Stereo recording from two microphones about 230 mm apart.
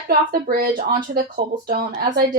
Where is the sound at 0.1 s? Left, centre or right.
Right.